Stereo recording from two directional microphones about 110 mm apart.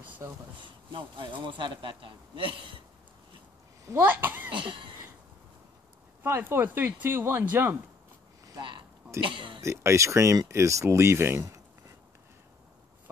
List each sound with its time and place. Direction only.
0.2 s speech: 25° right (ahead or behind)
0.9 s a man's voice: 45° right (ahead or behind)
3.8 s speech: 25° right (ahead or behind)
4.6 s a man's voice: 50° right (ahead or behind)
6.2 s speech: 20° right (ahead or behind)
8.5 s a sound: 45° right (ahead or behind)
9.2 s a man's voice: 50° right (ahead or behind)
9.6 s speech: 25° right (ahead or behind)